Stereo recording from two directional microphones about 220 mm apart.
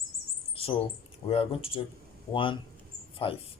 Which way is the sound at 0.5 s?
25° left (ahead or behind).